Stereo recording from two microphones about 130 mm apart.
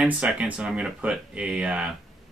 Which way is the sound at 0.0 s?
5° right (ahead or behind).